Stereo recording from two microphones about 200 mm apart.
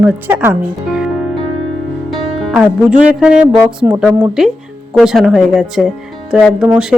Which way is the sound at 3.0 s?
5° right (ahead or behind).